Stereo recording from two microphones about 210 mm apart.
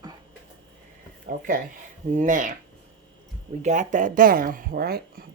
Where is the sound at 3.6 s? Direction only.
35° right (ahead or behind).